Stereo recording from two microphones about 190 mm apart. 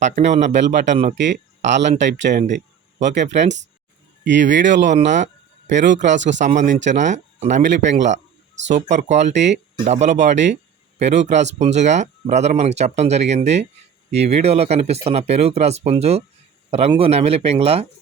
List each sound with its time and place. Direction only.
0.0 s speech: 40° right (ahead or behind)
1.7 s speech: 70° right (ahead or behind)
2.3 s speech: 40° right (ahead or behind)
4.2 s speech: 70° right (ahead or behind)
4.9 s a sound: 40° right (ahead or behind)
5.7 s speech: 70° right (ahead or behind)
6.4 s speech: 40° right (ahead or behind)